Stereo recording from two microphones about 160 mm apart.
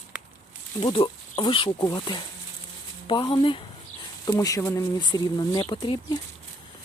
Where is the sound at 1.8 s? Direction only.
20° left (ahead or behind).